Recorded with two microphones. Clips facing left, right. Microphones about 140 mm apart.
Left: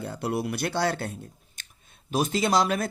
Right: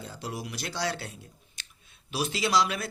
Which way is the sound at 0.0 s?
60° left (ahead or behind).